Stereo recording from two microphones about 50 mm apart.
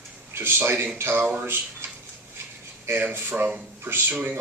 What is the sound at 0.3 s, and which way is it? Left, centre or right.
Speech, right.